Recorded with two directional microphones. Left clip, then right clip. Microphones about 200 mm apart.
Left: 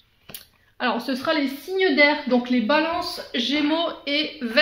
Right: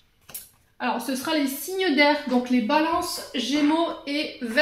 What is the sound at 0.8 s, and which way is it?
A woman's voice, 40° left (ahead or behind).